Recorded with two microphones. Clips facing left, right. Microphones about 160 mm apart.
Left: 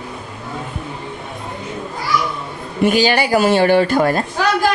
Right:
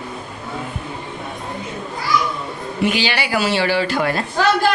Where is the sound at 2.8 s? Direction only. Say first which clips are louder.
Left 6 dB; 45° left (ahead or behind).